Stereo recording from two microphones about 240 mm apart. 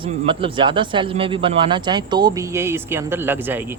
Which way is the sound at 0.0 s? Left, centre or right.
Right.